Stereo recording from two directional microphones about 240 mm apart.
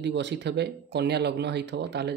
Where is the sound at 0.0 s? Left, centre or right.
Right.